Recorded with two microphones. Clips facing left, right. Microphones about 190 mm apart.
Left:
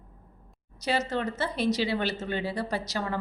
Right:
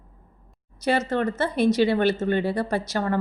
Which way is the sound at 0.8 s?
55° right (ahead or behind).